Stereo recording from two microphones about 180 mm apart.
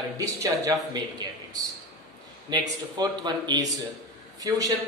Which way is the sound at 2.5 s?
25° right (ahead or behind).